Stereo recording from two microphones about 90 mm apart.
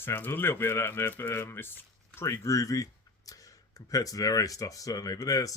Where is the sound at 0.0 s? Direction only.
25° left (ahead or behind).